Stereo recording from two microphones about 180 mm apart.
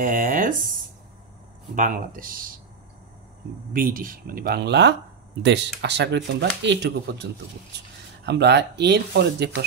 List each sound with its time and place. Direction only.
0.0 s speech: 50° right (ahead or behind)
1.8 s speech: 50° right (ahead or behind)
3.7 s speech: 50° right (ahead or behind); by 9.7 s 65° right (ahead or behind)